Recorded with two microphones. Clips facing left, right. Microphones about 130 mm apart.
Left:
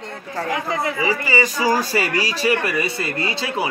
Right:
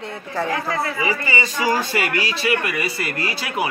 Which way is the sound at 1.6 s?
40° left (ahead or behind).